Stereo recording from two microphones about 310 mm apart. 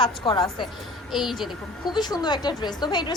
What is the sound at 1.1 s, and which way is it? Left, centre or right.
Speech, centre.